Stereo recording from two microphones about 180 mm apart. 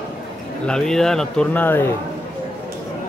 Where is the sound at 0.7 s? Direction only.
5° left (ahead or behind).